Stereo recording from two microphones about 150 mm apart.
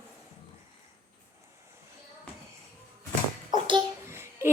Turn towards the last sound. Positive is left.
turn(degrees=-15)  # may be behind; listen again after turning